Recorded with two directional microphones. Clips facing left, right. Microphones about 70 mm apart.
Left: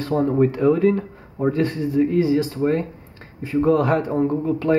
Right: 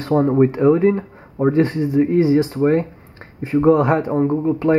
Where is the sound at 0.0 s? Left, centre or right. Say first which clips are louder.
Right 3 dB; right.